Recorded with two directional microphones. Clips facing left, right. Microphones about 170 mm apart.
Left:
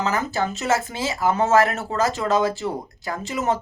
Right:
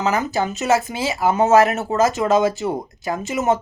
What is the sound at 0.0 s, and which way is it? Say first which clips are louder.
Speech: right 3 dB; 20° right (ahead or behind).